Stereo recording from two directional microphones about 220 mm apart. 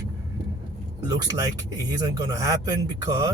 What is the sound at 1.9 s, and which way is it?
Speech, 15° right (ahead or behind).